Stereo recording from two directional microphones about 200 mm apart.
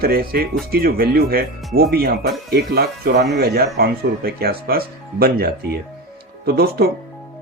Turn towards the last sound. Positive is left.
turn(degrees=-50)  # may be behind; listen again after turning